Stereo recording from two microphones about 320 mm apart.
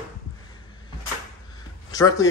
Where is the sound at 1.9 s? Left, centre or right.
Centre.